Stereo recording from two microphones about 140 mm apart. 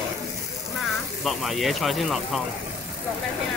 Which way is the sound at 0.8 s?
Centre (ahead or behind).